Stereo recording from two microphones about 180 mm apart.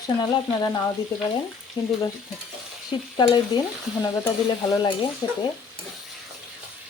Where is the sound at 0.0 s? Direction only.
20° left (ahead or behind).